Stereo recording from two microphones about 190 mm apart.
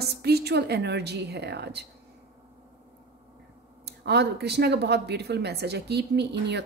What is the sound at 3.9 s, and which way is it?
A woman's voice, 60° right (ahead or behind).